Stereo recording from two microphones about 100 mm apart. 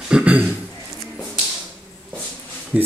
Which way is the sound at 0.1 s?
15° right (ahead or behind).